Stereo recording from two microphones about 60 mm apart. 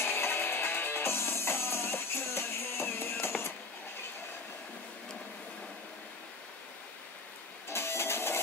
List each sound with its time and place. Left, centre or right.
0.0 s music: left
7.7 s printer: left